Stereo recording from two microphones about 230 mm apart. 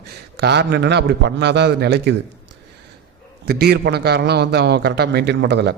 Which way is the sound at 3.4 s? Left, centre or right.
Right.